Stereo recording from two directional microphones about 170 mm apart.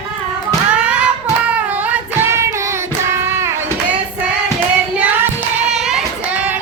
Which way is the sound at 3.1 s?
15° right (ahead or behind).